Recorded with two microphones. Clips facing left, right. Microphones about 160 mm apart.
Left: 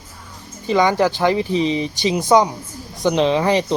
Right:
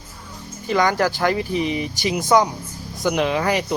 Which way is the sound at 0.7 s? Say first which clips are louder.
Left 3 dB; 20° left (ahead or behind).